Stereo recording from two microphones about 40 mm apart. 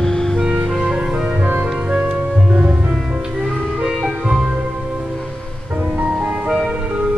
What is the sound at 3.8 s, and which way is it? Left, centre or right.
Music, centre.